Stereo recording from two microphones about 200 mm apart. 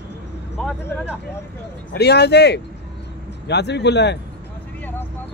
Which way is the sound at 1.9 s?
55° left (ahead or behind).